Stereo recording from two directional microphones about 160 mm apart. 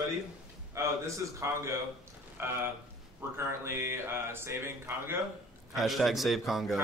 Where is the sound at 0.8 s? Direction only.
20° right (ahead or behind).